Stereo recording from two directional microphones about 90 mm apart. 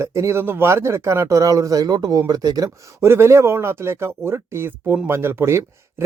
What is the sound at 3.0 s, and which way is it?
Speech, 30° right (ahead or behind).